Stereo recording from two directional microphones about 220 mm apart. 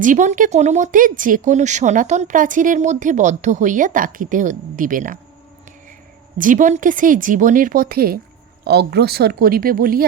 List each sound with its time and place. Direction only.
0.0 s speech: 35° right (ahead or behind)
6.4 s speech: 35° right (ahead or behind)